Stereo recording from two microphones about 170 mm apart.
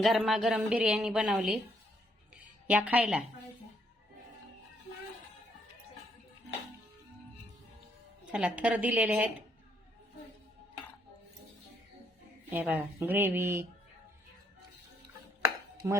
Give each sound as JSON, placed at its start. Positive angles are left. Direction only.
{"t": 0.0, "sound": "a woman's voice", "side_deg": 0}
{"t": 2.3, "sound": "a sound", "side_deg": -10}
{"t": 8.3, "sound": "speech", "side_deg": -5}
{"t": 12.5, "sound": "speech", "side_deg": -10}
{"t": 15.8, "sound": "speech", "side_deg": -20}